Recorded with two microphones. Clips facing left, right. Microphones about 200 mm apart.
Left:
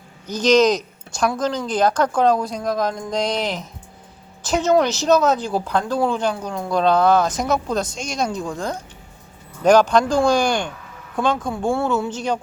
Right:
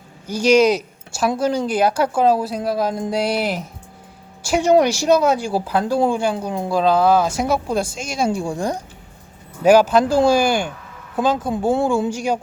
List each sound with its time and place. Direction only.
0.3 s speech: 10° right (ahead or behind)
6.7 s speech: 5° right (ahead or behind)